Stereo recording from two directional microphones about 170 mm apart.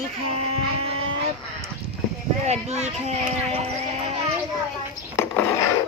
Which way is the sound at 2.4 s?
40° right (ahead or behind).